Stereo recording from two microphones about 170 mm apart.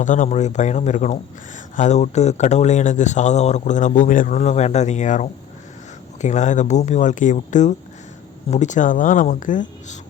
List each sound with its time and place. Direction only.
0.0 s speech: 45° left (ahead or behind)